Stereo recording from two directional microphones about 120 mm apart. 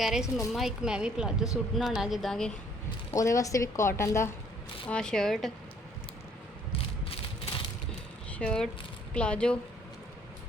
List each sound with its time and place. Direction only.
0.0 s a woman's voice: 5° right (ahead or behind)
3.1 s a woman's voice: 25° left (ahead or behind)
4.9 s a woman's voice: 5° left (ahead or behind)
6.7 s rattle: 50° left (ahead or behind)
8.4 s speech: 5° left (ahead or behind)